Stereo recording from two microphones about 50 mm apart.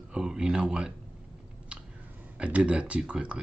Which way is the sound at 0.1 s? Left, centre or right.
Centre.